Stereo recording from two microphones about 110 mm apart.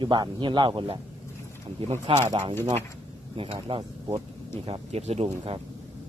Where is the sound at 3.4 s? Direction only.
55° right (ahead or behind).